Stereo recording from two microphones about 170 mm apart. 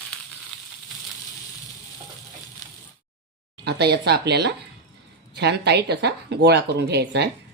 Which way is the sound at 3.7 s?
75° right (ahead or behind).